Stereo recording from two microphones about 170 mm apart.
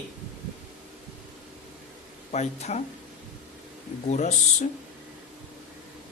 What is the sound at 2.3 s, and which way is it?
Speech, 40° left (ahead or behind).